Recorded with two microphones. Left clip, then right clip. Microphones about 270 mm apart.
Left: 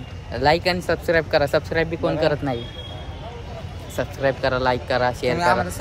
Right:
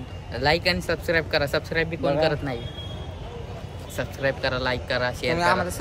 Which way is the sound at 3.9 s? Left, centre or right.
Centre.